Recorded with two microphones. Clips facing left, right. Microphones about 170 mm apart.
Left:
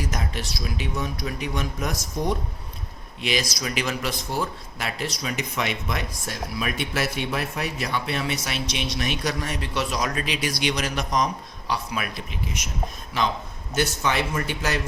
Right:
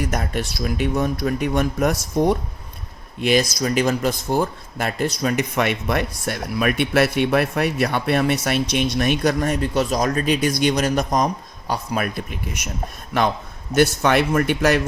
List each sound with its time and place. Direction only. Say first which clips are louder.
0.0 s a man's voice: right 6 dB; 55° right (ahead or behind)